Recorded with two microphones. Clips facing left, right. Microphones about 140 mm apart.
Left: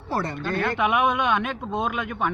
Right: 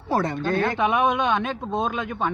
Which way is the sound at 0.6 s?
30° right (ahead or behind).